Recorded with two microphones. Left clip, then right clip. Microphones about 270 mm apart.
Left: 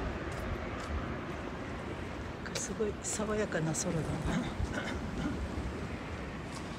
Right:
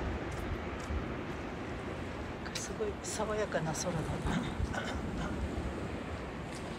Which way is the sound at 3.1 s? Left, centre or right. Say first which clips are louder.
Right 1 dB; centre.